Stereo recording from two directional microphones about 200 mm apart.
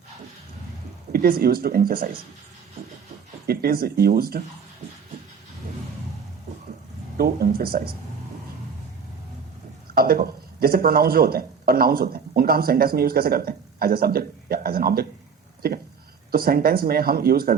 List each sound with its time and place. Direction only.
1.1 s speech: 50° right (ahead or behind)
3.4 s speech: 50° right (ahead or behind)
7.2 s speech: 50° right (ahead or behind)
9.9 s speech: 50° right (ahead or behind)